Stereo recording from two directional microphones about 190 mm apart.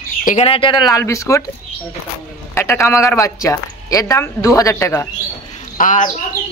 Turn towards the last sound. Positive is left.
turn(degrees=45)  # may be behind; listen again after turning